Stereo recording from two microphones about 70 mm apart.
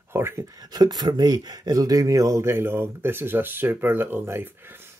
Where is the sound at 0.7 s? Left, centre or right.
Right.